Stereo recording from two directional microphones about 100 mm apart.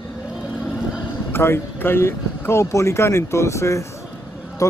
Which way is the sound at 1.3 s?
20° left (ahead or behind).